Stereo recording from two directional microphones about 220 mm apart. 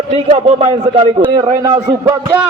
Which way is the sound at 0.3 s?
30° right (ahead or behind).